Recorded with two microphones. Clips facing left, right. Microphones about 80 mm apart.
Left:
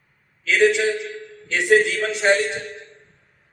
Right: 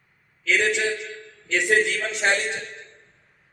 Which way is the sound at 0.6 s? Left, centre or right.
Centre.